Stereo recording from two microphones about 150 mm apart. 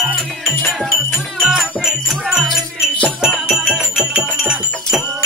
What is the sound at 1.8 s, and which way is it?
Wind chime, 5° right (ahead or behind).